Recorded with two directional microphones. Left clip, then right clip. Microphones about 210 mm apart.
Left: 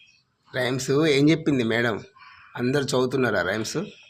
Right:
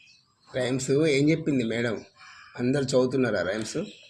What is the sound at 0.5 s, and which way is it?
Speech, 30° left (ahead or behind).